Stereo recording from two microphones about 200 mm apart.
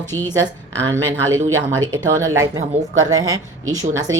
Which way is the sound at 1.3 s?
85° right.